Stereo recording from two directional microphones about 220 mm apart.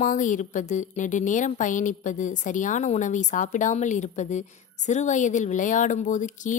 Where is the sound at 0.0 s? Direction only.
35° left (ahead or behind).